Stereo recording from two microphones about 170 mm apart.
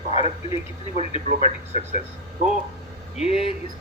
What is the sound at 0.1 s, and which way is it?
Speech, 35° left (ahead or behind).